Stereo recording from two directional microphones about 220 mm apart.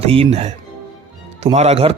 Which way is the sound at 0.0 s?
25° right (ahead or behind).